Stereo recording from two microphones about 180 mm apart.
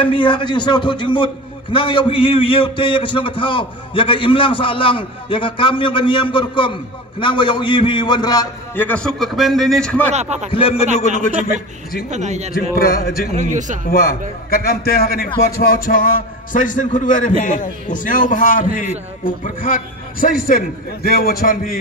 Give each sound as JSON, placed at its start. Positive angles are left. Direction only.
{"t": 0.0, "sound": "a man's voice", "side_deg": 25}
{"t": 8.7, "sound": "a man's voice", "side_deg": 10}
{"t": 10.1, "sound": "speech", "side_deg": -40}
{"t": 10.5, "sound": "a man's voice", "side_deg": 30}
{"t": 12.1, "sound": "speech", "side_deg": -40}
{"t": 12.5, "sound": "speech", "side_deg": 60}
{"t": 13.3, "sound": "a man's voice", "side_deg": -45}
{"t": 13.8, "sound": "a man's voice", "side_deg": 55}